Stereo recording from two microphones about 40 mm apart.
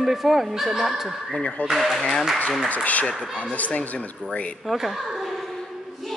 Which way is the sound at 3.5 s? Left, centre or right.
Left.